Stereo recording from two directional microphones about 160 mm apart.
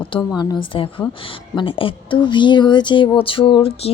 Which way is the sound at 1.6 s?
35° left (ahead or behind).